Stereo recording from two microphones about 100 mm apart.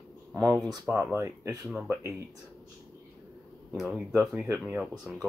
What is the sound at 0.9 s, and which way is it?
Speech, 20° right (ahead or behind).